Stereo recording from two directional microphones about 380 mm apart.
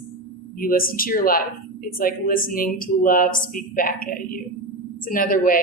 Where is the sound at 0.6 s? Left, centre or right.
Left.